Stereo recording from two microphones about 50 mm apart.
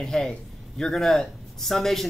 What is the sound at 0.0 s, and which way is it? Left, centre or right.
Speech, centre.